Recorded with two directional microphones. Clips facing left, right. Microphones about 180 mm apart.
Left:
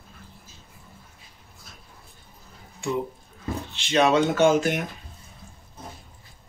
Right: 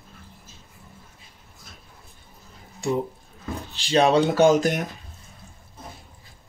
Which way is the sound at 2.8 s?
40° right (ahead or behind).